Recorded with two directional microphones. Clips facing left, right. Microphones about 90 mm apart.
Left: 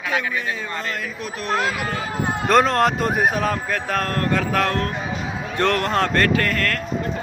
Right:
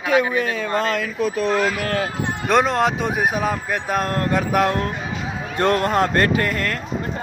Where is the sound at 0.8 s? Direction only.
90° right.